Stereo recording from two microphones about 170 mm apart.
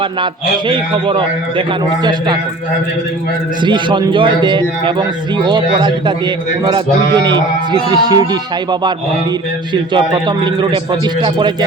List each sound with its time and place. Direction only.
0.7 s a man's voice: 30° right (ahead or behind)
3.6 s a man's voice: 25° right (ahead or behind)
9.7 s a man's voice: 25° right (ahead or behind)